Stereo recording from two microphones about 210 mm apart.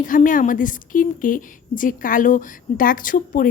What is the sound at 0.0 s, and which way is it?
A woman's voice, 40° left (ahead or behind).